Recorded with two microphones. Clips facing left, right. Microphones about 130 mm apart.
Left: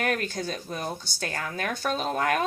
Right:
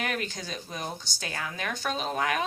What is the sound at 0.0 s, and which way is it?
A woman's voice, 45° left (ahead or behind).